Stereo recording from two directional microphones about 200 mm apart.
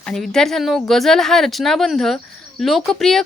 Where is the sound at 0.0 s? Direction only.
Centre (ahead or behind).